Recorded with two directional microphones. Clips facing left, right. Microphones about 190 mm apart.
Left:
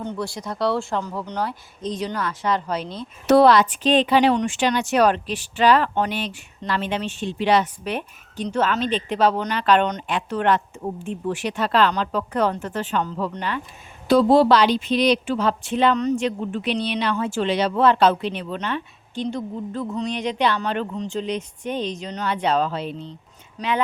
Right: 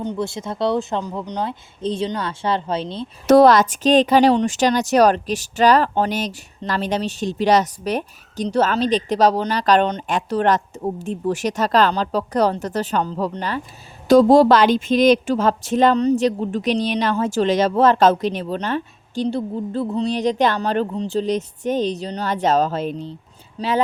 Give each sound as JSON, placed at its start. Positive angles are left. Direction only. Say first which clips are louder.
{"t": 0.0, "sound": "speech", "louder": "right 4 dB", "side_deg": -20}
{"t": 3.2, "sound": "a woman's voice", "louder": "right 3 dB", "side_deg": -45}